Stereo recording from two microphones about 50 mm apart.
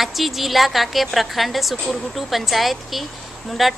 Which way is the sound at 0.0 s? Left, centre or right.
Centre.